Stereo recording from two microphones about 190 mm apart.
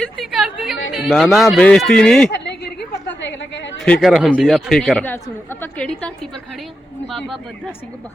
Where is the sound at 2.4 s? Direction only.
60° left (ahead or behind).